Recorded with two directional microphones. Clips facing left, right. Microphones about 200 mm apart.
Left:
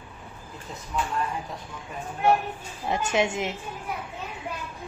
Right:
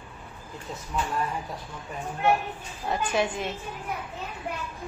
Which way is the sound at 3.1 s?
25° left (ahead or behind).